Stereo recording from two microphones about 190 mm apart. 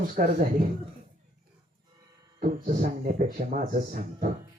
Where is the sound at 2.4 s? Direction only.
40° right (ahead or behind).